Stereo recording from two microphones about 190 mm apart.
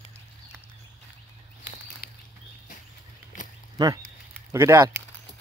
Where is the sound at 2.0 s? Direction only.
50° left (ahead or behind).